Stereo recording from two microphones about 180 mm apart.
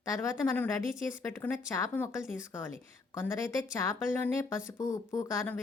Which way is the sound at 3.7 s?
15° left (ahead or behind).